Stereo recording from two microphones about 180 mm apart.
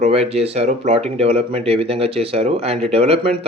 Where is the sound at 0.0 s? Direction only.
35° right (ahead or behind).